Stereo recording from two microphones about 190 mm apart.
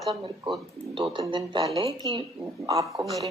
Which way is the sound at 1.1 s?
20° right (ahead or behind).